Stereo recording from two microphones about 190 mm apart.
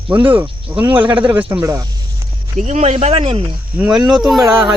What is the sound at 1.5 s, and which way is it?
Speech, 15° right (ahead or behind).